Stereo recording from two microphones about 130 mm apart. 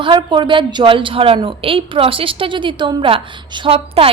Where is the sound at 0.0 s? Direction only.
40° right (ahead or behind).